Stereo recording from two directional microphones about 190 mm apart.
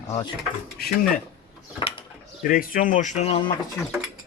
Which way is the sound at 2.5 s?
50° left (ahead or behind).